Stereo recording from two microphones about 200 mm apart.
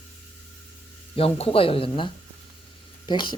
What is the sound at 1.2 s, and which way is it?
Speech, 30° left (ahead or behind).